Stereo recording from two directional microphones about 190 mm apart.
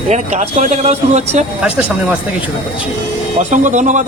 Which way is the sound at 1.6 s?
5° right (ahead or behind).